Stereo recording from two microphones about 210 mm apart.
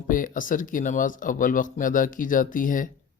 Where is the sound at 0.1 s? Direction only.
40° left (ahead or behind).